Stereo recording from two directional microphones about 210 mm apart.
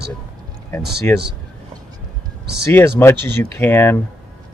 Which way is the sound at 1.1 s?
10° left (ahead or behind).